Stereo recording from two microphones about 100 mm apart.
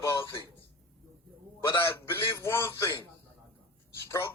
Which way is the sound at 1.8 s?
25° left (ahead or behind).